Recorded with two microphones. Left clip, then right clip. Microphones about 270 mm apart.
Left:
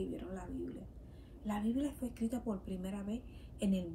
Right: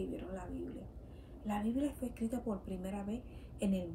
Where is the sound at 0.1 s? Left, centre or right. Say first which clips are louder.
Right 1 dB; centre.